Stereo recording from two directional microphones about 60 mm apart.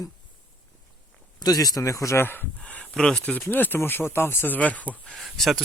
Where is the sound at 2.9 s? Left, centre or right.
Centre.